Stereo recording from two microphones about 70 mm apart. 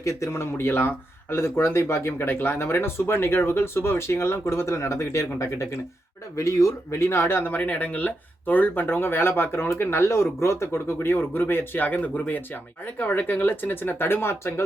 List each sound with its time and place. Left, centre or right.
0.0 s speech: left